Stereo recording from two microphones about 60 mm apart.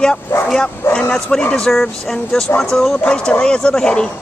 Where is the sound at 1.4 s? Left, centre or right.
Centre.